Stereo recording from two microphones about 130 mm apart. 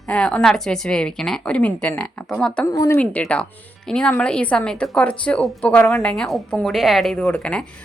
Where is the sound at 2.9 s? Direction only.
10° left (ahead or behind).